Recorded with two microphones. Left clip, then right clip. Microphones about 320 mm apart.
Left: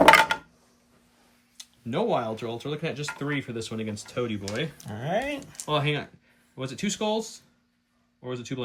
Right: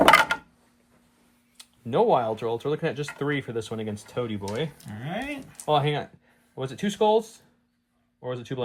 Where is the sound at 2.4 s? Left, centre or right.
Centre.